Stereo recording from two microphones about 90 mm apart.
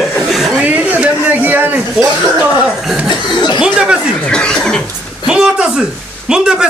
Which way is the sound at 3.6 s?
10° right (ahead or behind).